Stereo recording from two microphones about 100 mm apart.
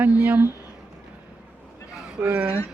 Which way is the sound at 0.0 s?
15° right (ahead or behind).